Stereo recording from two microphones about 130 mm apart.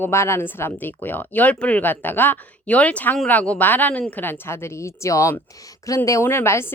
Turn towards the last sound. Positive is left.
turn(degrees=20)  # may be behind; listen again after turning